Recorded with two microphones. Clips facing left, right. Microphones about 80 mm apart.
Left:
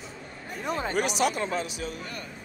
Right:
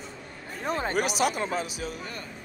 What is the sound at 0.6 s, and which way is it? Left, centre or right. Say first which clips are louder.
Speech: right 1 dB; right.